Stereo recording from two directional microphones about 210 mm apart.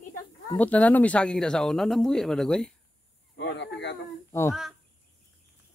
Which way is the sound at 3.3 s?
55° left (ahead or behind).